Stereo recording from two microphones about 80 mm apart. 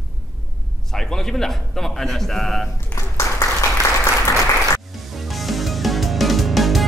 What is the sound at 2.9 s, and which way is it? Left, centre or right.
Clapping, left.